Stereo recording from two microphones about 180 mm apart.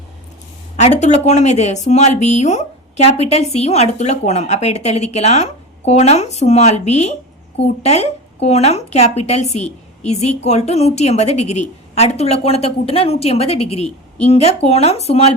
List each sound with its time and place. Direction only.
0.8 s speech: 40° left (ahead or behind)